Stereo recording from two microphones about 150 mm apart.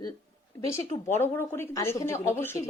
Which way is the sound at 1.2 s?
15° left (ahead or behind).